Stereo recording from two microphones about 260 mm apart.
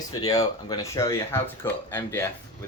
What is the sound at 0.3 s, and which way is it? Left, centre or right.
Speech, centre.